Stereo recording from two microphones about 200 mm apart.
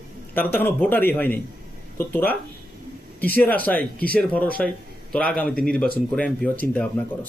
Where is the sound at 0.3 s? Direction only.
10° left (ahead or behind).